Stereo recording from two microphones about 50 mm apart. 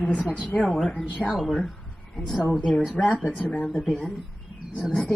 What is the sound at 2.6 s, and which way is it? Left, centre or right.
Speech, centre.